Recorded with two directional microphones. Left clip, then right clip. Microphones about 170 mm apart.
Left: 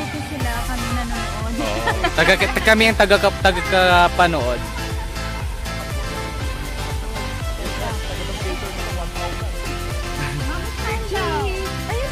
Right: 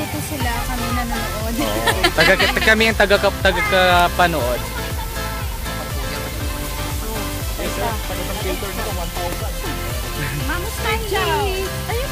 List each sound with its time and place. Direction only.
1.9 s music: 20° left (ahead or behind)
2.5 s speech: 40° left (ahead or behind)